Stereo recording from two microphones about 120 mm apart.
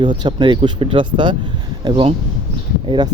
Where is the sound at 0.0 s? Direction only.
40° right (ahead or behind).